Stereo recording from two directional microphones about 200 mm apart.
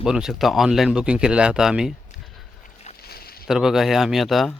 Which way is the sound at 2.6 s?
35° left (ahead or behind).